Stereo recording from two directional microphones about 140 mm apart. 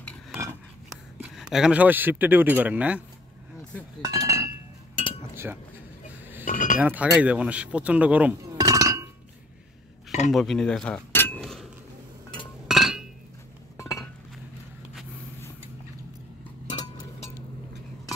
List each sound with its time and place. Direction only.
1.2 s speech: 5° right (ahead or behind)
4.0 s chink: 25° right (ahead or behind)
5.3 s dishes: 15° right (ahead or behind)
6.4 s chink: 70° left (ahead or behind)
6.8 s speech: 10° right (ahead or behind)
8.4 s chink: 25° right (ahead or behind)
10.3 s speech: centre (ahead or behind)
11.4 s chink: centre (ahead or behind)
13.7 s chink: 20° left (ahead or behind)
16.6 s a sound: 30° left (ahead or behind)